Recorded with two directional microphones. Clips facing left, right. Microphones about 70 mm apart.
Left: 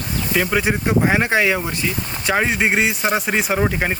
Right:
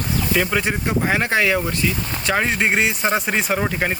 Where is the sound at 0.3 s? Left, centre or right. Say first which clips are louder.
Left 3 dB; centre.